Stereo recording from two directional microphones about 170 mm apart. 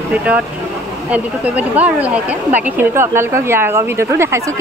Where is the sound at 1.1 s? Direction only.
10° right (ahead or behind).